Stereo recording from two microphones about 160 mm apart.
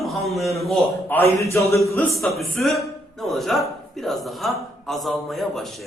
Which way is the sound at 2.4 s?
Centre (ahead or behind).